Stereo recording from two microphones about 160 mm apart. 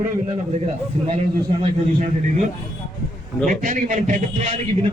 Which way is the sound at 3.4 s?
55° right (ahead or behind).